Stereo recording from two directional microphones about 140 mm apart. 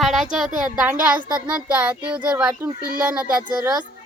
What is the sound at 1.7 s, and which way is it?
Child singing, 10° right (ahead or behind).